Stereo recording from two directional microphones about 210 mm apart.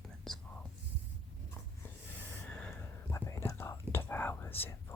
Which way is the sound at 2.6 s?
10° left (ahead or behind).